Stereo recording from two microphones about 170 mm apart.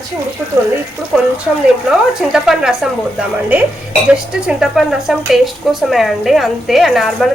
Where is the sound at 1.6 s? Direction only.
5° right (ahead or behind).